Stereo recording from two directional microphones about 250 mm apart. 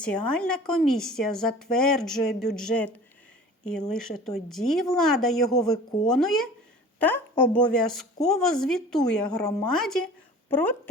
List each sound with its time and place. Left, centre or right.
0.0 s speech: centre
5.5 s speech: centre
6.1 s speech: centre